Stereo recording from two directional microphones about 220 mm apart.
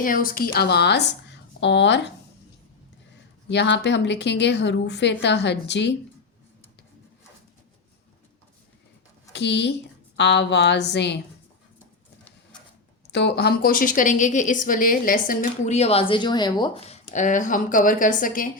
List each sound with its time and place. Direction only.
0.0 s speech: 40° left (ahead or behind)
3.5 s speech: 50° left (ahead or behind)
9.3 s a woman's voice: 50° left (ahead or behind)
13.1 s a woman's voice: 50° left (ahead or behind)